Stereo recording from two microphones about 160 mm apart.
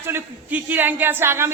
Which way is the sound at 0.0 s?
10° right (ahead or behind).